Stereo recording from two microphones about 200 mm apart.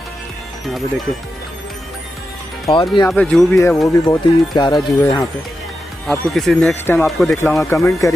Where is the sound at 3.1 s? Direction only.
5° left (ahead or behind).